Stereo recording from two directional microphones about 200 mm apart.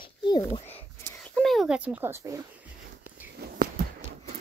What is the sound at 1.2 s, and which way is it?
A child's voice, centre (ahead or behind).